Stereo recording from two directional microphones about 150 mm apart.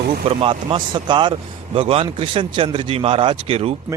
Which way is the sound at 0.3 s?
35° right (ahead or behind).